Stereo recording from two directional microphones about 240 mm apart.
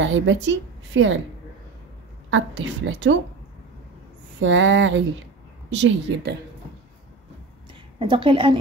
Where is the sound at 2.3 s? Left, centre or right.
Right.